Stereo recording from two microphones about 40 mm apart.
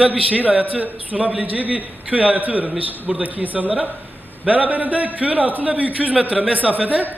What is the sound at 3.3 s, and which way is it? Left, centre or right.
A man's voice, right.